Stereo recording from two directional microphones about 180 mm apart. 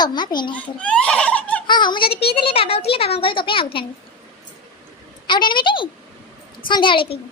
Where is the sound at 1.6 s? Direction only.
25° left (ahead or behind).